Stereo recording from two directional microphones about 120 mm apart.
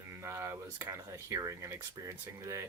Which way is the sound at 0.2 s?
25° right (ahead or behind).